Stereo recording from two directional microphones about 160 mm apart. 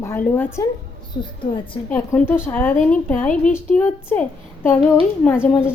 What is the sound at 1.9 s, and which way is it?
Speech, 10° left (ahead or behind).